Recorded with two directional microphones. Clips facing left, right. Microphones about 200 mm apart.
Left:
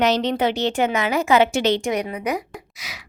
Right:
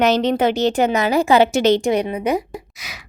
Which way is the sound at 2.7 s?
50° right (ahead or behind).